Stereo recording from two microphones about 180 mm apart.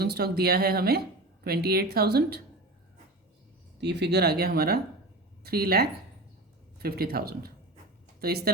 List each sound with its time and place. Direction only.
0.0 s speech: 60° right (ahead or behind)
3.8 s a woman's voice: 70° right (ahead or behind)